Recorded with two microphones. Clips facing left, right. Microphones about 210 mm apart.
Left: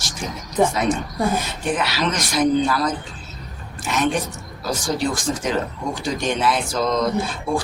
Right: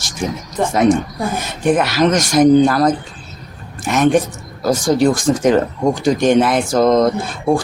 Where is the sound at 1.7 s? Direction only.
50° right (ahead or behind).